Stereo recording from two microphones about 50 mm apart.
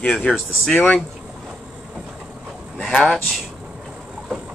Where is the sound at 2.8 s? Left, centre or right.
Centre.